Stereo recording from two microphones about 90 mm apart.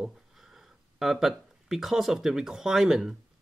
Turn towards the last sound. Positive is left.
turn(degrees=-5)  # may be behind; listen again after turning